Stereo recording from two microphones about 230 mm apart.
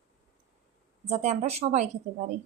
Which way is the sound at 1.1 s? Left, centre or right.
Right.